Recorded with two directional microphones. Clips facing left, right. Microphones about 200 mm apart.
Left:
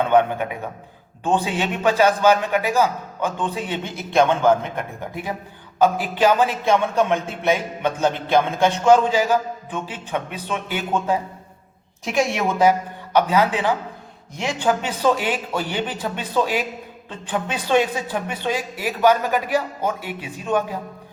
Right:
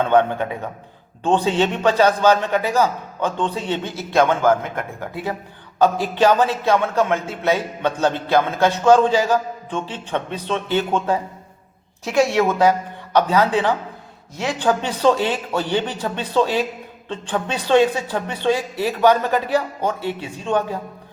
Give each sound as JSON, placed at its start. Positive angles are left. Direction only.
{"t": 0.1, "sound": "a man's voice", "side_deg": 15}